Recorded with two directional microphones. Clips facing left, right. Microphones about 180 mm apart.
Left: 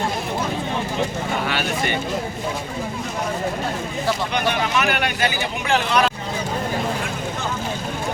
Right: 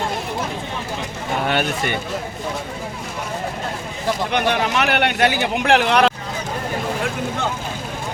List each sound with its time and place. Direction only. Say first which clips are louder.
4.3 s speech: right 2 dB; 65° right (ahead or behind)